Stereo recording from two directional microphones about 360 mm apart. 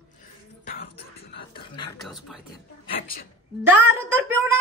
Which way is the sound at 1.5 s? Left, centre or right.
Centre.